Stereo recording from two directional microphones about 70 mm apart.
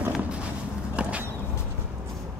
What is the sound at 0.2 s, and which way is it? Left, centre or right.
Vehicle, centre.